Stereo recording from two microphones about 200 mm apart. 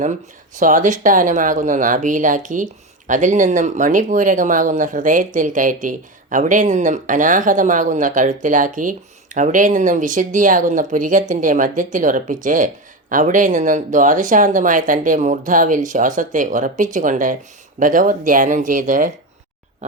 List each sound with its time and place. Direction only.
0.6 s speech: 40° right (ahead or behind)